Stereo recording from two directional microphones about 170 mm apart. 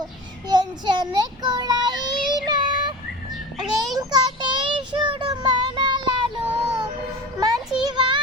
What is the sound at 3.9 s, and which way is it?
Child singing, 20° right (ahead or behind).